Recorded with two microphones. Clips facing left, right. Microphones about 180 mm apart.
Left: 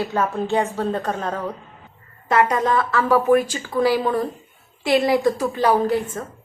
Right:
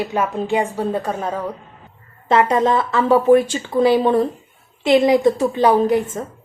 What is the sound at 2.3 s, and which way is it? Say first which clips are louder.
A woman's voice: right 3 dB; 25° right (ahead or behind).